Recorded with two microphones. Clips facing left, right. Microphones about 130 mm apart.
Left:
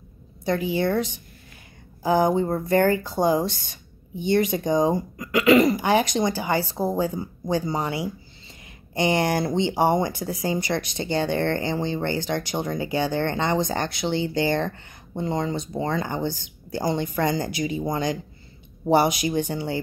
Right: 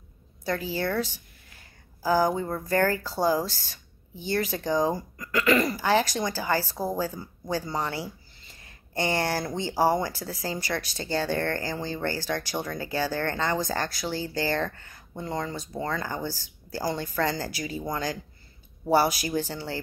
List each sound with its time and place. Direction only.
0.5 s a woman's voice: 15° left (ahead or behind)